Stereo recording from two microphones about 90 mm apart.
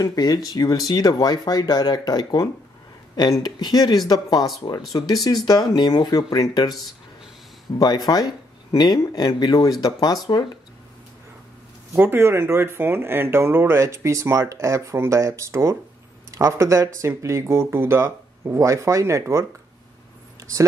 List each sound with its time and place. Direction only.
0.0 s speech: 45° left (ahead or behind)
8.7 s speech: 55° left (ahead or behind)
11.9 s speech: 25° right (ahead or behind)